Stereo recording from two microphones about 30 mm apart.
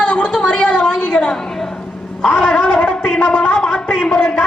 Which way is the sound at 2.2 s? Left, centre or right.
Left.